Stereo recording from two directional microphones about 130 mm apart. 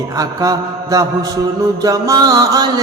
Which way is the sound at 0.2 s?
25° right (ahead or behind).